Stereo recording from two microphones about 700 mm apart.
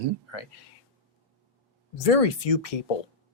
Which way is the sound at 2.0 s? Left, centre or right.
Left.